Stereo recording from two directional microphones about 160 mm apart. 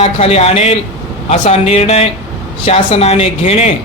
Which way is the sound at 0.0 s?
40° left (ahead or behind).